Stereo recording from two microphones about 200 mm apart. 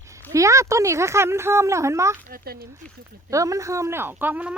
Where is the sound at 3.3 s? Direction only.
15° right (ahead or behind).